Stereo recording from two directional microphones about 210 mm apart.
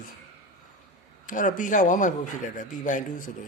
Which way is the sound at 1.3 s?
40° left (ahead or behind).